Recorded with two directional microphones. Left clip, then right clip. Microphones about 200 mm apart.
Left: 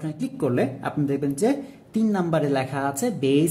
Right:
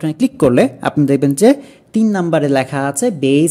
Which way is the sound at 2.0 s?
35° right (ahead or behind).